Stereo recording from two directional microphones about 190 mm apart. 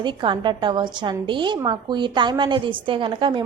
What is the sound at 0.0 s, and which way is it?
A woman's voice, 25° right (ahead or behind).